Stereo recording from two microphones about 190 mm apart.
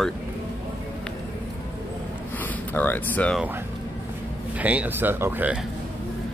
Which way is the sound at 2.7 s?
10° left (ahead or behind).